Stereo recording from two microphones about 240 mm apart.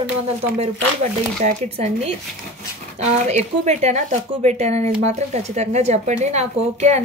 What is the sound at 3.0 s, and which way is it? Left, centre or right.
Speech, right.